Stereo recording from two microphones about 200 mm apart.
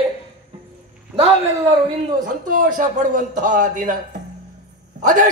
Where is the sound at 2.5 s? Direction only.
40° right (ahead or behind).